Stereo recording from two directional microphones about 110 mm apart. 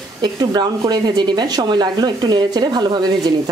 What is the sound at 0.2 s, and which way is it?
Speech, 40° right (ahead or behind).